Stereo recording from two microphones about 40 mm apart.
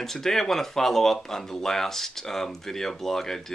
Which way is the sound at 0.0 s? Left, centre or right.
Centre.